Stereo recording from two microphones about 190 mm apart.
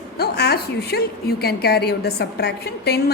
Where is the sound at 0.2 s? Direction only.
55° left (ahead or behind).